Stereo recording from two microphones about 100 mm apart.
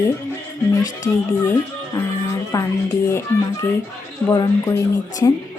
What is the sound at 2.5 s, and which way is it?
A woman's voice, 35° left (ahead or behind).